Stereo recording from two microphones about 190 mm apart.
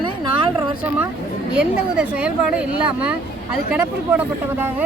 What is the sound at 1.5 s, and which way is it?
Speech, 5° right (ahead or behind).